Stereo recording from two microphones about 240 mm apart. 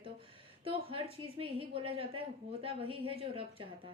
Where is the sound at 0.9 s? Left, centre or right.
Right.